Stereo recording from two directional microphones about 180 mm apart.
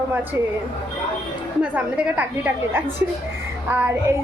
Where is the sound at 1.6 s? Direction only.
10° right (ahead or behind).